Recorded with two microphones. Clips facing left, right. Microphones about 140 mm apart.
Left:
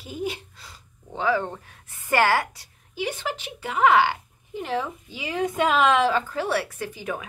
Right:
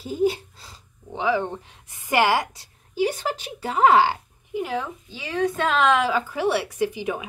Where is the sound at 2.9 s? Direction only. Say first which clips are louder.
Right 5 dB; 40° right (ahead or behind).